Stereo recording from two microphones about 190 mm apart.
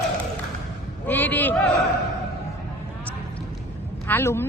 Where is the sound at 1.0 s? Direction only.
10° left (ahead or behind).